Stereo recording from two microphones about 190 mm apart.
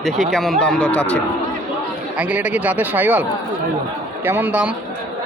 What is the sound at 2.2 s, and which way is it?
Speech, 10° right (ahead or behind).